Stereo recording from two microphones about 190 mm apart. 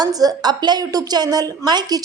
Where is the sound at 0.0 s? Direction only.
20° right (ahead or behind).